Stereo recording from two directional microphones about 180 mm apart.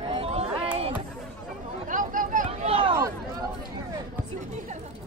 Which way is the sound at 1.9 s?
45° right (ahead or behind).